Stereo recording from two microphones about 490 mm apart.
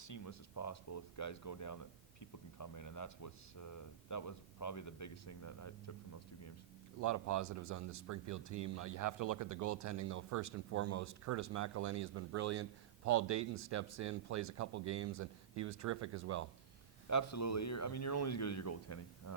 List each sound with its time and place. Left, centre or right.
0.0 s speech: left
7.0 s speech: right
17.1 s speech: left